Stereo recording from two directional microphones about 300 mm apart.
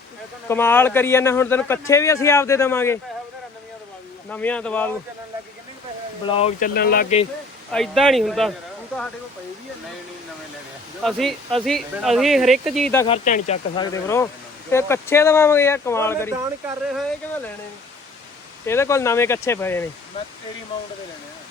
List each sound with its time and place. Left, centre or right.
0.4 s a man's voice: centre
4.3 s speech: centre
6.2 s speech: centre
7.7 s speech: centre
11.0 s speech: centre
13.1 s a man's voice: left; by 16.3 s centre
16.4 s speech: centre
18.6 s a man's voice: centre